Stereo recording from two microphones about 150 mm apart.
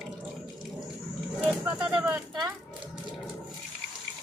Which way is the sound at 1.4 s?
10° right (ahead or behind).